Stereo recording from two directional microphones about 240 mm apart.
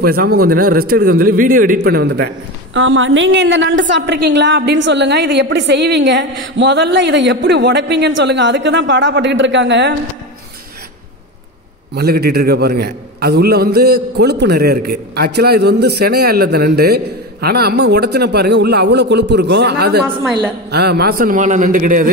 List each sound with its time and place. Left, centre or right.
0.0 s speech: right
11.9 s a man's voice: right